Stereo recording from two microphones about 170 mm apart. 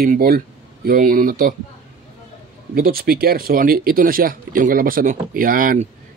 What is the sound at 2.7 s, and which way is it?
Speech, 60° right (ahead or behind).